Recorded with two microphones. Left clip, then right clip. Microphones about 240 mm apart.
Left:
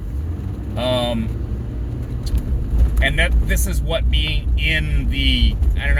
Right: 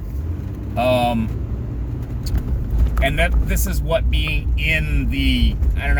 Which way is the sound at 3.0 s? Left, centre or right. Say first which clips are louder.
Even; centre.